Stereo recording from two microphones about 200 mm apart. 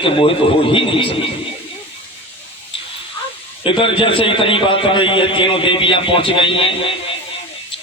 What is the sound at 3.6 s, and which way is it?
A man's voice, 25° left (ahead or behind).